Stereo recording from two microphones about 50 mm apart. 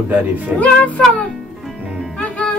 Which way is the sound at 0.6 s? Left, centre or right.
Left.